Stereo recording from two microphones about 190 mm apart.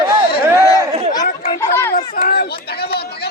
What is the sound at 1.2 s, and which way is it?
Children playing, 50° left (ahead or behind).